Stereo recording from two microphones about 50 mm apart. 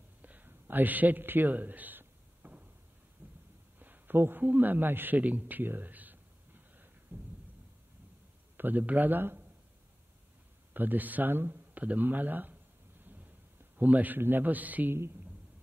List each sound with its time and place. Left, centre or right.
0.2 s a sound: right
8.5 s speech: right
10.7 s speech: right
13.0 s thunder: right
13.7 s speech: right
14.9 s speech: right